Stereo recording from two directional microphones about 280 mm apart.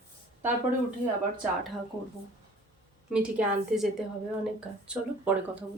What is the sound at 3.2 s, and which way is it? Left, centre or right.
Speech, centre.